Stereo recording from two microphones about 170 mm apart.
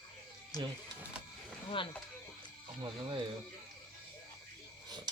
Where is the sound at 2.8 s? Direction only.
25° right (ahead or behind).